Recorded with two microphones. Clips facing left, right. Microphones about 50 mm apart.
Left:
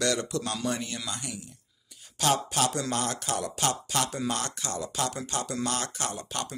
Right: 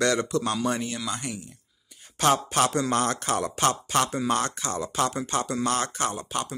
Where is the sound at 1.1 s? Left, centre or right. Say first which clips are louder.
Right 4 dB; right.